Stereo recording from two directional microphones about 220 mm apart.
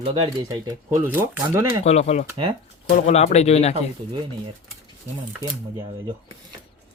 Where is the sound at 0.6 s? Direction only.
10° right (ahead or behind).